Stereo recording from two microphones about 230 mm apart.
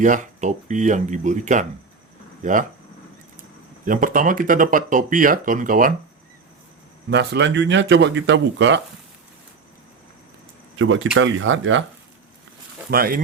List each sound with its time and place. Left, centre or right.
0.0 s speech: right
3.8 s speech: right
7.1 s speech: right
10.8 s speech: right
12.9 s speech: right